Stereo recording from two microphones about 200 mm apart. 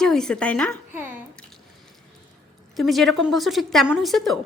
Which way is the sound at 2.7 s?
Centre (ahead or behind).